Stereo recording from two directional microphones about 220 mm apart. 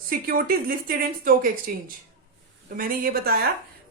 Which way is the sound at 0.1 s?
40° right (ahead or behind).